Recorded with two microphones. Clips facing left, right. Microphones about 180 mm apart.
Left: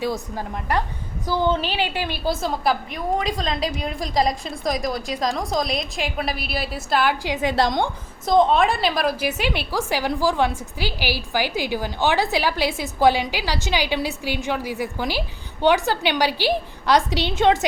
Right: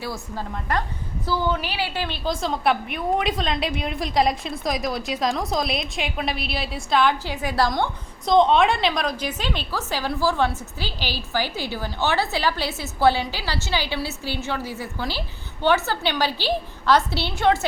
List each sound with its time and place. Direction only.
0.0 s a woman's voice: 15° left (ahead or behind)
7.4 s a woman's voice: 20° left (ahead or behind)
8.3 s a woman's voice: centre (ahead or behind); by 17.6 s 20° left (ahead or behind)